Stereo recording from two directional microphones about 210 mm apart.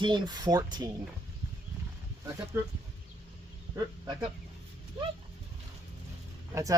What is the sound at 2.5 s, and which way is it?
Speech, 10° right (ahead or behind).